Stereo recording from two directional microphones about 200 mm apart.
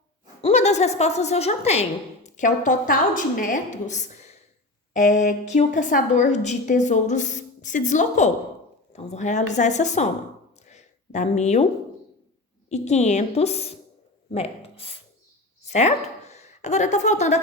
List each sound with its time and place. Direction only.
0.4 s a woman's voice: 35° left (ahead or behind)
10.7 s a sound: 35° left (ahead or behind)
12.6 s a woman's voice: 35° left (ahead or behind)